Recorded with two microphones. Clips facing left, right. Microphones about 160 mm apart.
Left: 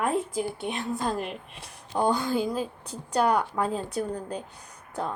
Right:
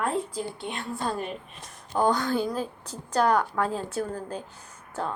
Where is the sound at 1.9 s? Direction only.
10° left (ahead or behind).